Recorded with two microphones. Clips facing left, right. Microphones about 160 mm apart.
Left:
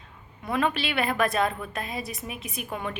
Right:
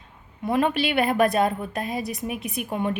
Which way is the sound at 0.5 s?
50° right (ahead or behind).